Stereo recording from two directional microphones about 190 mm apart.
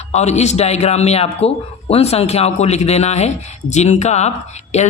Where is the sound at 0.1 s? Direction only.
35° left (ahead or behind).